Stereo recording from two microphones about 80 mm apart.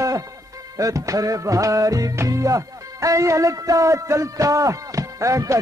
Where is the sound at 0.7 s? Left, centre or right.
Right.